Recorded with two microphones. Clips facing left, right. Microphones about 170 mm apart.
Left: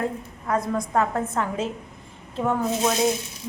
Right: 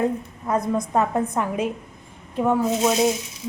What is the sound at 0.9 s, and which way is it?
Speech, 15° right (ahead or behind).